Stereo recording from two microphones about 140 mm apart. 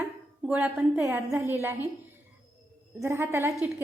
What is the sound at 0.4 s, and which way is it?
A woman's voice, 10° right (ahead or behind).